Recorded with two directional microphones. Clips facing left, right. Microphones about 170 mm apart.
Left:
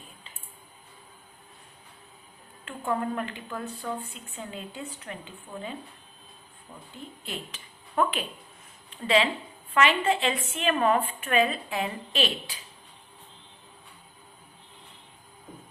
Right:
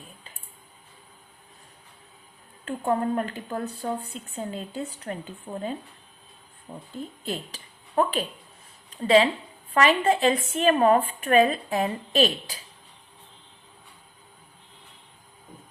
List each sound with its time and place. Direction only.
2.6 s a woman's voice: 35° right (ahead or behind)